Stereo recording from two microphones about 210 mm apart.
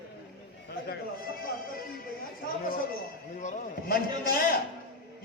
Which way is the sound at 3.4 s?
40° left (ahead or behind).